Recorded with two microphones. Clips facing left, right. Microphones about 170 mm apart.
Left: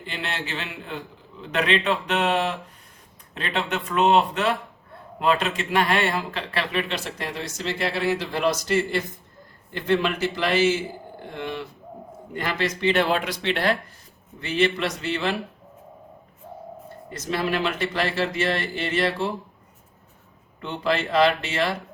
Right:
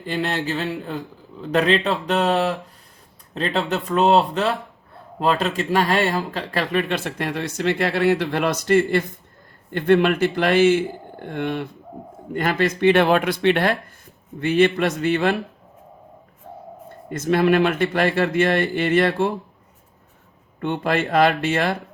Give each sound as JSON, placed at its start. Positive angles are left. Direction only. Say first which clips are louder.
{"t": 0.0, "sound": "a man's voice", "louder": "right 8 dB", "side_deg": -40}
{"t": 17.1, "sound": "speech", "louder": "right 8 dB", "side_deg": -50}
{"t": 20.6, "sound": "speech", "louder": "right 3 dB", "side_deg": -50}